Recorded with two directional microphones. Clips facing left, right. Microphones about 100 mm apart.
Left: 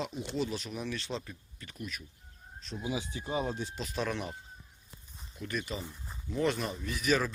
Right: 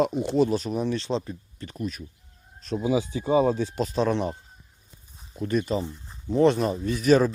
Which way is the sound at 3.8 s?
35° right (ahead or behind).